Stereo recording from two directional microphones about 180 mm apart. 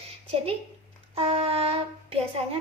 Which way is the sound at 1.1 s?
35° right (ahead or behind).